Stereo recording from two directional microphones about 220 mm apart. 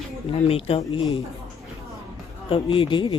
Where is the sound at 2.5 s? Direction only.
25° left (ahead or behind).